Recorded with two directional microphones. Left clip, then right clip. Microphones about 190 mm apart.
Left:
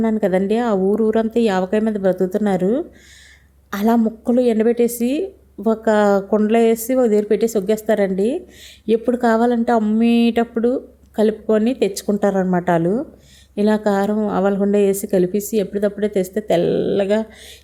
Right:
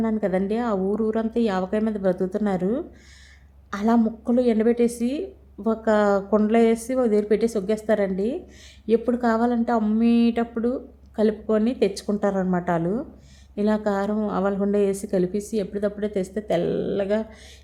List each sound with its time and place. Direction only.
0.0 s a woman's voice: 25° left (ahead or behind)